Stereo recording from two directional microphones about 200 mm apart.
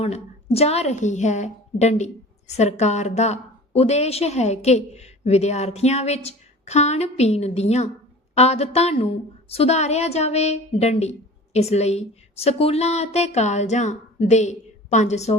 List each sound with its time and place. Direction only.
0.0 s a woman's voice: 30° left (ahead or behind)